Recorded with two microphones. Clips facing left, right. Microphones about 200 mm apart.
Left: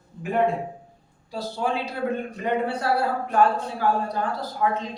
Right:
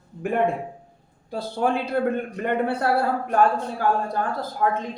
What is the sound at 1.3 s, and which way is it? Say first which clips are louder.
Speech: right 3 dB; 55° right (ahead or behind).